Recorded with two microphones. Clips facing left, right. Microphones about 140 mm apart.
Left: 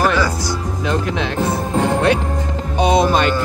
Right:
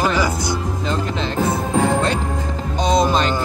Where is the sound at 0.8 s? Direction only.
60° left (ahead or behind).